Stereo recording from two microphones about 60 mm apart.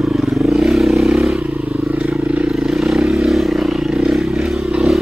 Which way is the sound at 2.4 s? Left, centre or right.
Centre.